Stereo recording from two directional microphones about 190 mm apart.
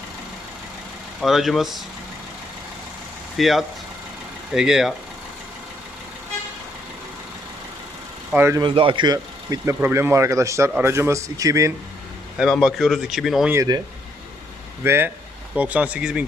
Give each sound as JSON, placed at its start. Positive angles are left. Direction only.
{"t": 1.2, "sound": "speech", "side_deg": 0}
{"t": 3.3, "sound": "speech", "side_deg": 0}
{"t": 8.3, "sound": "speech", "side_deg": -10}
{"t": 8.6, "sound": "speech", "side_deg": -25}
{"t": 12.4, "sound": "speech", "side_deg": 0}
{"t": 13.5, "sound": "speech", "side_deg": -20}
{"t": 14.8, "sound": "speech", "side_deg": -10}